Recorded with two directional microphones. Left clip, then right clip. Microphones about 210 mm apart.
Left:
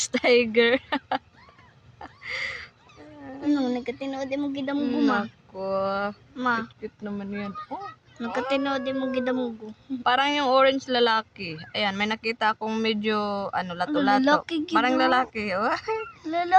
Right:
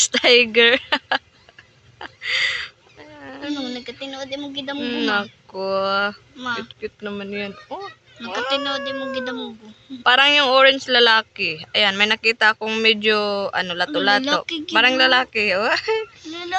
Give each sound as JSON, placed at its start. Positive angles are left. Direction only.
{"t": 0.0, "sound": "speech", "side_deg": 0}
{"t": 2.0, "sound": "a sound", "side_deg": 0}
{"t": 3.5, "sound": "speech", "side_deg": 40}
{"t": 4.8, "sound": "speech", "side_deg": 0}
{"t": 6.3, "sound": "speech", "side_deg": 50}
{"t": 6.8, "sound": "speech", "side_deg": 0}
{"t": 8.2, "sound": "speech", "side_deg": 45}
{"t": 10.0, "sound": "speech", "side_deg": 0}
{"t": 14.3, "sound": "speech", "side_deg": 45}
{"t": 14.8, "sound": "speech", "side_deg": 0}
{"t": 16.3, "sound": "speech", "side_deg": 45}